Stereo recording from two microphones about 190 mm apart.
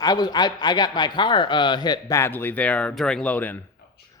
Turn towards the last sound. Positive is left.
turn(degrees=10)  # may be behind; listen again after turning